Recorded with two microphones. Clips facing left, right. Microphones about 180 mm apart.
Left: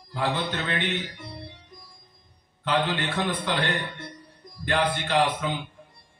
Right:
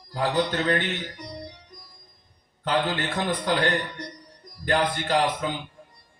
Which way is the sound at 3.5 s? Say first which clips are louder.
Right 5 dB; 40° right (ahead or behind).